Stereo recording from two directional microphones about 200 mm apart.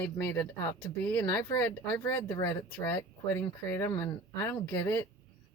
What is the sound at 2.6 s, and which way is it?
Speech, 10° left (ahead or behind).